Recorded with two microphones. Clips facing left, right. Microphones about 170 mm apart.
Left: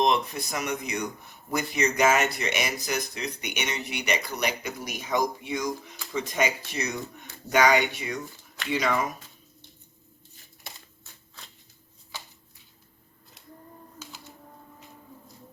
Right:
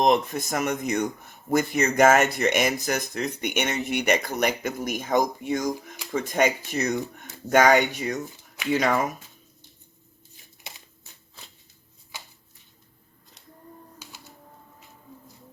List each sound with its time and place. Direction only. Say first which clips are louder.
0.0 s speech: right 3 dB; 45° right (ahead or behind)
14.0 s music: left 2 dB; 10° right (ahead or behind)